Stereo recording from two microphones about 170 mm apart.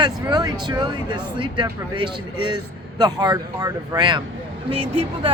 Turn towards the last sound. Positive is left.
turn(degrees=-35)  # may be behind; listen again after turning